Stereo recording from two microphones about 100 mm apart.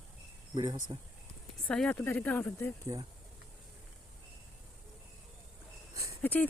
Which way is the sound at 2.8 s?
35° right (ahead or behind).